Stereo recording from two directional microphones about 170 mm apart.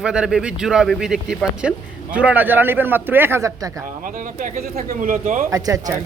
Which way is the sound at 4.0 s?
50° right (ahead or behind).